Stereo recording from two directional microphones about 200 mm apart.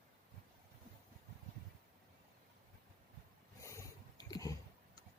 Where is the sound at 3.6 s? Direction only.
15° left (ahead or behind).